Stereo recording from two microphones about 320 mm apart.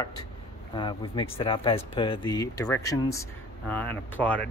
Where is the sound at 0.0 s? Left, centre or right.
Centre.